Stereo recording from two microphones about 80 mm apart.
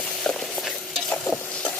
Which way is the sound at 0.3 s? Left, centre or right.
Centre.